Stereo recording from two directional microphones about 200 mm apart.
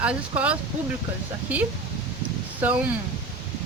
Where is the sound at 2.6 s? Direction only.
10° right (ahead or behind).